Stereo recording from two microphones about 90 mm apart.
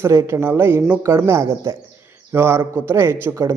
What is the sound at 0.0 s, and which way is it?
A man's voice, 35° right (ahead or behind).